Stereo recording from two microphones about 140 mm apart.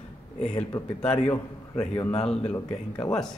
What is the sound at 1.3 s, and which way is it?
Speech, 25° left (ahead or behind).